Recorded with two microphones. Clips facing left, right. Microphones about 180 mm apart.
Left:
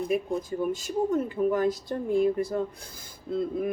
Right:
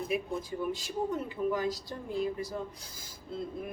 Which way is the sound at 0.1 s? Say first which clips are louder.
Left 5 dB; 45° left (ahead or behind).